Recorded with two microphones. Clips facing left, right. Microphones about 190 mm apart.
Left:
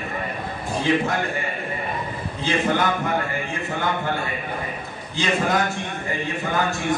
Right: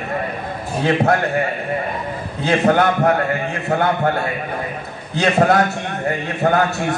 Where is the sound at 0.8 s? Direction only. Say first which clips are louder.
Right 5 dB; 70° right (ahead or behind).